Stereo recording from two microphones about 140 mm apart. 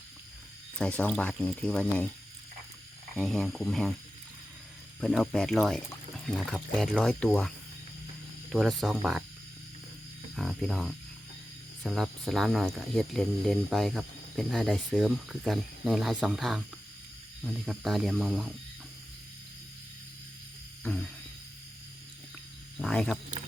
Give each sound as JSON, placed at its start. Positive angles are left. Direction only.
{"t": 0.8, "sound": "speech", "side_deg": 10}
{"t": 3.2, "sound": "speech", "side_deg": 0}
{"t": 4.9, "sound": "speech", "side_deg": 5}
{"t": 10.3, "sound": "speech", "side_deg": 0}
{"t": 20.8, "sound": "a sound", "side_deg": 10}
{"t": 22.8, "sound": "frog", "side_deg": 5}